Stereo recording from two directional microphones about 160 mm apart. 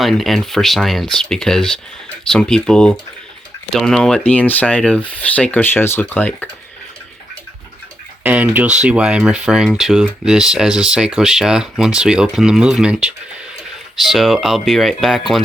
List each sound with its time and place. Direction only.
0.0 s speech: centre (ahead or behind)
8.2 s speech: 10° right (ahead or behind)